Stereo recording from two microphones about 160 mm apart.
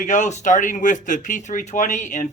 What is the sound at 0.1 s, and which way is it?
Speech, 50° left (ahead or behind).